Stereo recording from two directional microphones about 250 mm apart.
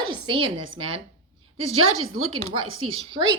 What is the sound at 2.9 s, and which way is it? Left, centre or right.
Speech, centre.